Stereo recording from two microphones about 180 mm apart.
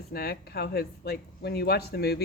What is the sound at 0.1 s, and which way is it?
Speech, 60° left (ahead or behind).